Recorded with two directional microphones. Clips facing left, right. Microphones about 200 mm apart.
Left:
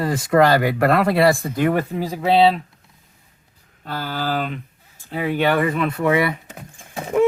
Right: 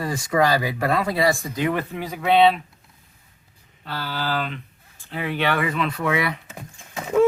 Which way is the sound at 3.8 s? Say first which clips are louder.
Left 3 dB; 45° left (ahead or behind).